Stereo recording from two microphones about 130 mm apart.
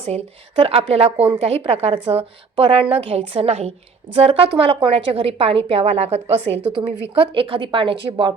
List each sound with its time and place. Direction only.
0.6 s a woman's voice: 50° right (ahead or behind)
6.8 s a woman's voice: 40° right (ahead or behind)